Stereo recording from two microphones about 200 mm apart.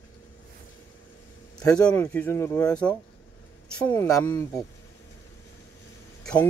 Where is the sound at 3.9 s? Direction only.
15° left (ahead or behind).